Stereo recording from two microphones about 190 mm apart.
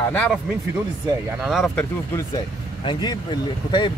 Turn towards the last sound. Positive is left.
turn(degrees=25)  # may be behind; listen again after turning